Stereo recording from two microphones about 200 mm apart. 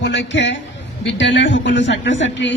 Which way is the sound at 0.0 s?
65° left (ahead or behind).